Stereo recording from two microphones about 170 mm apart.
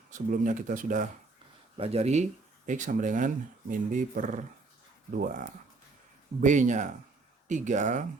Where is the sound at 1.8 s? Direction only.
35° right (ahead or behind).